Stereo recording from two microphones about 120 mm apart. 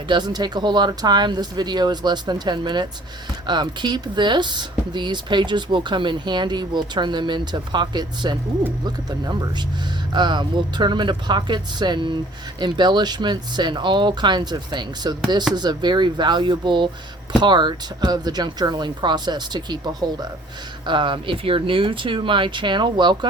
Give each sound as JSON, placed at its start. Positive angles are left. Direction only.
{"t": 0.1, "sound": "speech", "side_deg": -35}